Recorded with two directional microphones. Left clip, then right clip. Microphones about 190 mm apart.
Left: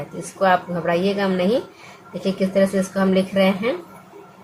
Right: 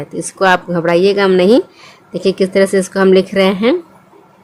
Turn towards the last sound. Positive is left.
turn(degrees=-55)  # may be behind; listen again after turning